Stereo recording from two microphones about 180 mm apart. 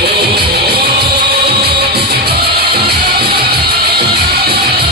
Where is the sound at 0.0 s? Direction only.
65° right (ahead or behind).